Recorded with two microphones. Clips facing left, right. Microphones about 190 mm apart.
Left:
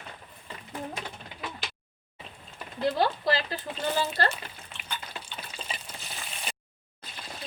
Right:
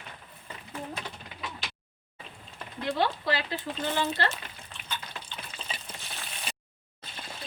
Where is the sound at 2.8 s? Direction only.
40° left (ahead or behind).